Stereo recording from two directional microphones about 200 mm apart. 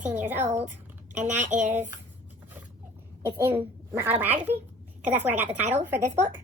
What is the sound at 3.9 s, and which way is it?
A woman's voice, 10° right (ahead or behind).